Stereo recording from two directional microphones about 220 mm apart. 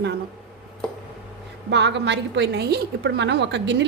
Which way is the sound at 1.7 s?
50° right (ahead or behind).